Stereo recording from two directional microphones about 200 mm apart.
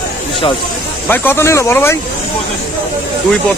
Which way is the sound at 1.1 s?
10° left (ahead or behind).